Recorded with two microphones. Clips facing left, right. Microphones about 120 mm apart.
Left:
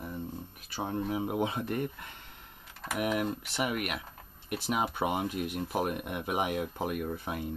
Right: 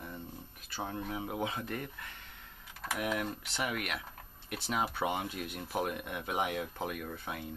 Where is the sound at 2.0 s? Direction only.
20° left (ahead or behind).